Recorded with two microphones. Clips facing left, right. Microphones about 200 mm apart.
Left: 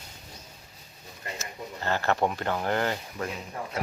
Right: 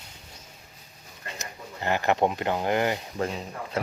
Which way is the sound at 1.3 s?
15° right (ahead or behind).